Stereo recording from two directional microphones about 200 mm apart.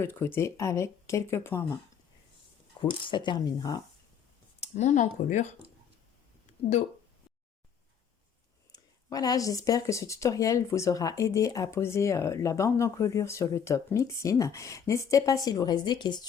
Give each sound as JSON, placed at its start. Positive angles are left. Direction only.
{"t": 0.0, "sound": "speech", "side_deg": 10}
{"t": 3.0, "sound": "speech", "side_deg": 25}
{"t": 4.6, "sound": "speech", "side_deg": 35}
{"t": 8.7, "sound": "speech", "side_deg": 20}